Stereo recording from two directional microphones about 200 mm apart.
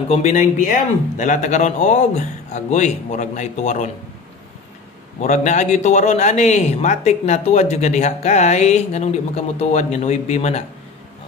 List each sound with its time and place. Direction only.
0.1 s speech: 40° left (ahead or behind)
5.2 s speech: 35° left (ahead or behind)